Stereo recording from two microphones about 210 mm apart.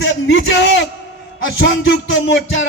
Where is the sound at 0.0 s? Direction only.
60° left (ahead or behind).